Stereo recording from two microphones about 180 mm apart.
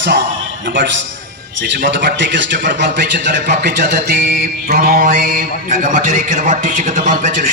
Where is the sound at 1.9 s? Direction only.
75° right (ahead or behind).